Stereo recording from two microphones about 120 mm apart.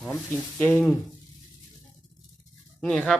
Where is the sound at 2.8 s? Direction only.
10° left (ahead or behind).